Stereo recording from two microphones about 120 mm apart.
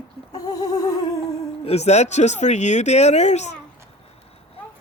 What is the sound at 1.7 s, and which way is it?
Speech, 65° left (ahead or behind).